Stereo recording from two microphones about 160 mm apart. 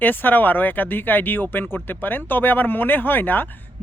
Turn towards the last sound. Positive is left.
turn(degrees=10)  # may be behind; listen again after turning